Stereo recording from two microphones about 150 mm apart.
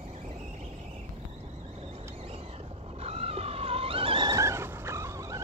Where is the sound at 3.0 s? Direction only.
45° right (ahead or behind).